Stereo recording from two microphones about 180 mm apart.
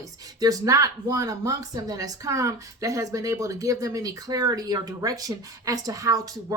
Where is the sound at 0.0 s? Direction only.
20° right (ahead or behind).